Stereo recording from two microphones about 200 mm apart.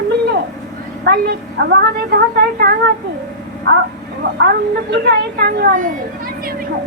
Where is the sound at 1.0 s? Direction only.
50° right (ahead or behind).